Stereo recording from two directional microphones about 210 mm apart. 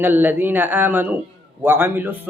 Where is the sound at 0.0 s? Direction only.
10° right (ahead or behind).